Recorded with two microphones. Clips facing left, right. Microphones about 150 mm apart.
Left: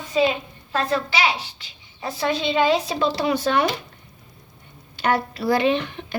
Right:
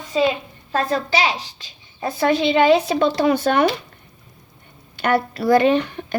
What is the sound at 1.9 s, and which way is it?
Speech, 55° right (ahead or behind).